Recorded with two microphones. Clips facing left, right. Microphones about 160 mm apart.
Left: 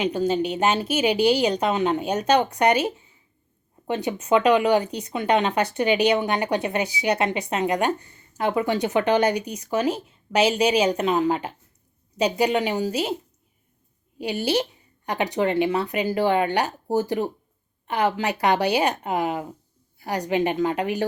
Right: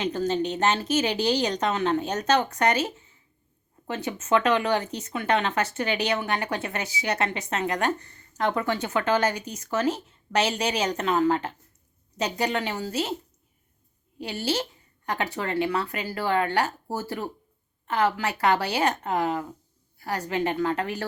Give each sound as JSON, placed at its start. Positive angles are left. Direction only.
{"t": 0.0, "sound": "a woman's voice", "side_deg": 10}
{"t": 14.2, "sound": "a woman's voice", "side_deg": 15}